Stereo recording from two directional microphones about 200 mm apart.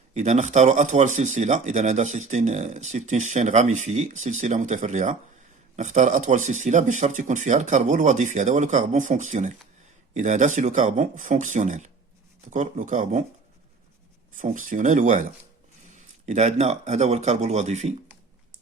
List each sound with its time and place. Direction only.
0.1 s speech: 35° right (ahead or behind)
14.3 s speech: 40° right (ahead or behind)